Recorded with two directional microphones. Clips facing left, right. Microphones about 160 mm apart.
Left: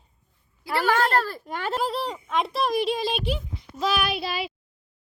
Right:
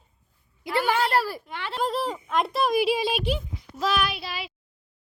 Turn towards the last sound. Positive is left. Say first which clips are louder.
# left 6 dB
turn(degrees=20)  # may be behind; listen again after turning